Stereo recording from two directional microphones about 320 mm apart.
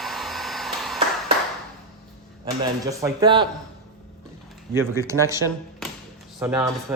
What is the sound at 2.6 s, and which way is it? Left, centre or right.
Speech, centre.